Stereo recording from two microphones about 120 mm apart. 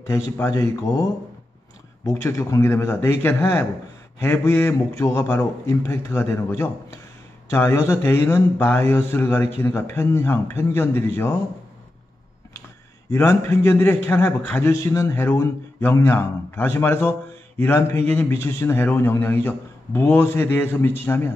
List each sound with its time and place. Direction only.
0.0 s a man's voice: 25° left (ahead or behind)
2.0 s a man's voice: 25° left (ahead or behind)
13.1 s a man's voice: 20° left (ahead or behind)